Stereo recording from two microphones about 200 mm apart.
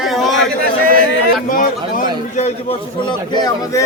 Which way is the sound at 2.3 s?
30° left (ahead or behind).